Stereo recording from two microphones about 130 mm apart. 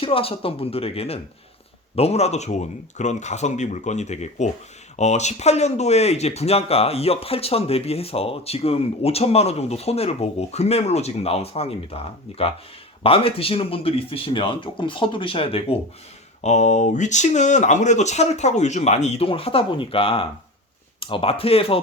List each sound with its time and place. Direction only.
0.0 s speech: 45° left (ahead or behind)
13.0 s speech: 45° left (ahead or behind)
16.4 s speech: 60° left (ahead or behind); by 21.8 s 45° left (ahead or behind)